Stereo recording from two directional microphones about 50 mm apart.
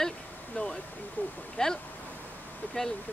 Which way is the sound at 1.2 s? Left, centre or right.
Left.